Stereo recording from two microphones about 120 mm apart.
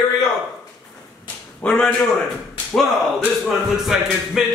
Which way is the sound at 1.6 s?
10° left (ahead or behind).